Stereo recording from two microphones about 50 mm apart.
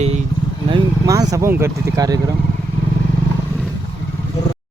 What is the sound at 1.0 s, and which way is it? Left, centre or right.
Vehicle, right.